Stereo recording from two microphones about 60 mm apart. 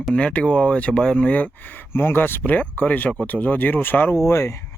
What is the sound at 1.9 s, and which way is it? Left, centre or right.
Speech, left.